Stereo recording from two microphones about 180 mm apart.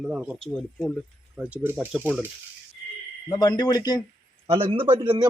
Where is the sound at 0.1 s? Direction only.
5° right (ahead or behind).